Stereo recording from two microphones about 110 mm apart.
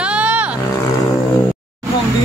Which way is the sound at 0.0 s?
10° right (ahead or behind).